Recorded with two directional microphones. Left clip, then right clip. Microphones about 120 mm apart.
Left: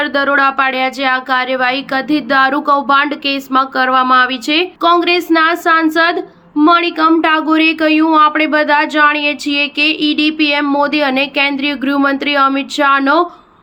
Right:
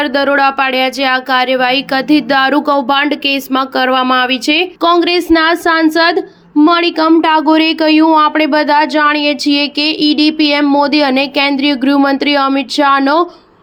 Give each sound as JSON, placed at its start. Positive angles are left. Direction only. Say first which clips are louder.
{"t": 0.0, "sound": "speech", "louder": "right 1 dB", "side_deg": -15}